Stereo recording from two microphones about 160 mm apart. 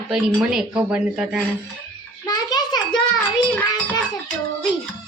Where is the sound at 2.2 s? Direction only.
25° left (ahead or behind).